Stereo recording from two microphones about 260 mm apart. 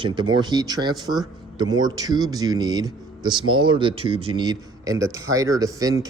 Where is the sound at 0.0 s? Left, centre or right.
Centre.